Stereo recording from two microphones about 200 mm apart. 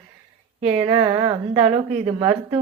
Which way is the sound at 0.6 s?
30° right (ahead or behind).